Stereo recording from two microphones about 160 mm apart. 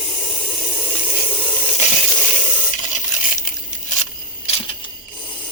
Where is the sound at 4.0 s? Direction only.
40° left (ahead or behind).